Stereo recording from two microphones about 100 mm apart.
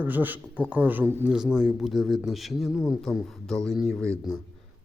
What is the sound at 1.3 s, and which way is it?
Speech, 5° right (ahead or behind).